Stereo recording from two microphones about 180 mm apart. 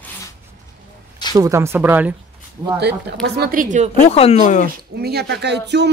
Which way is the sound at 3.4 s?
50° right (ahead or behind).